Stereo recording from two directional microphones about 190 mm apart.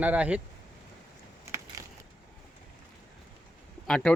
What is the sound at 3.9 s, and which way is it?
Speech, 5° left (ahead or behind).